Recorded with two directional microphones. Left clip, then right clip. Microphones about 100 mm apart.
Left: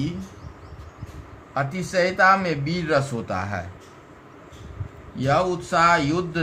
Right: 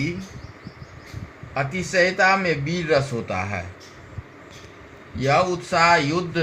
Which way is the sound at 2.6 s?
35° right (ahead or behind).